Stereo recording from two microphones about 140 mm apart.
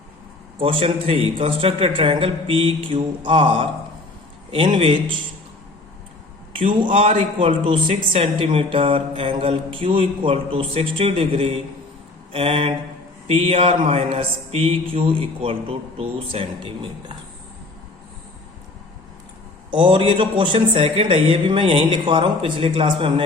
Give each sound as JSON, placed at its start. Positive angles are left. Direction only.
{"t": 0.6, "sound": "a man's voice", "side_deg": -40}
{"t": 6.8, "sound": "a man's voice", "side_deg": -40}
{"t": 13.2, "sound": "mantra", "side_deg": -45}
{"t": 19.7, "sound": "a man's voice", "side_deg": -40}